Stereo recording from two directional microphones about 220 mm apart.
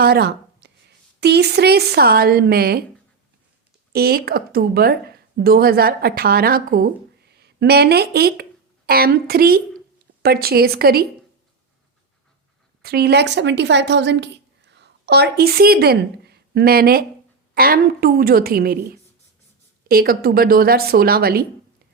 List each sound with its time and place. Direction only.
0.0 s speech: 45° right (ahead or behind)
3.9 s a woman's voice: 45° right (ahead or behind)
12.8 s a woman's voice: 45° right (ahead or behind)
19.9 s a woman's voice: 40° right (ahead or behind)